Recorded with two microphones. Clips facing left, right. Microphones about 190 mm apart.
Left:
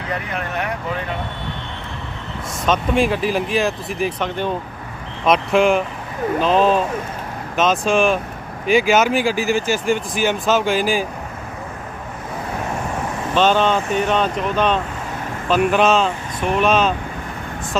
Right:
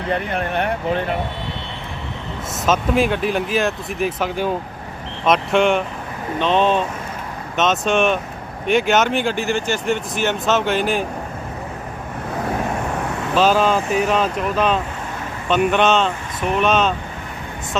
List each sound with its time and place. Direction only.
0.1 s speech: 30° right (ahead or behind)
2.6 s speech: 5° right (ahead or behind)
13.3 s speech: 5° right (ahead or behind)